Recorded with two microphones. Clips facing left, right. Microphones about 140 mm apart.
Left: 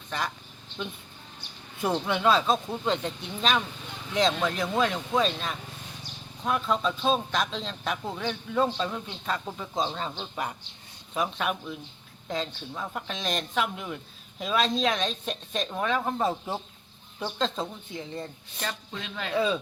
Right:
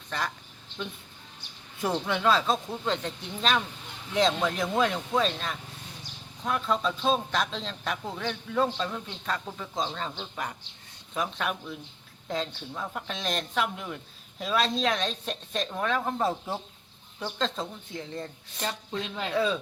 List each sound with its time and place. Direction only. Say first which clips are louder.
1.8 s speech: left 1 dB; 5° left (ahead or behind)
18.6 s speech: right 3 dB; 25° right (ahead or behind)
19.3 s speech: left 1 dB; 10° left (ahead or behind)